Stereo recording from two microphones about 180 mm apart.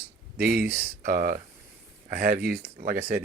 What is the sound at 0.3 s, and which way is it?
Speech, 60° right (ahead or behind).